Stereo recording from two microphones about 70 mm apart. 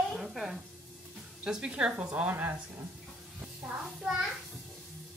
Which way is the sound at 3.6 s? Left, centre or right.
Centre.